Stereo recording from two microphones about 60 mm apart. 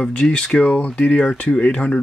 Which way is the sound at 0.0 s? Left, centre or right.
Left.